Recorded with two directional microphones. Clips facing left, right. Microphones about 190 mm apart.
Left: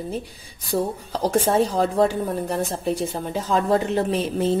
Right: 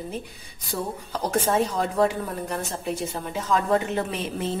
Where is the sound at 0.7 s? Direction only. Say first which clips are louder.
Left 6 dB; 30° left (ahead or behind).